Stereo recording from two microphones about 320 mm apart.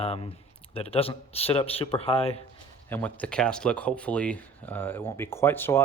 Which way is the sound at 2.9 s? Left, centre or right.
Centre.